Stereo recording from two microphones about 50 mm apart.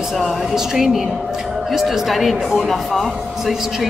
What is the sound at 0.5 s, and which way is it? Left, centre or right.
Speech, centre.